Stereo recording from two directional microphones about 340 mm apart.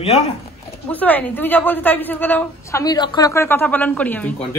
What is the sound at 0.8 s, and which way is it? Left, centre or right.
Speech, centre.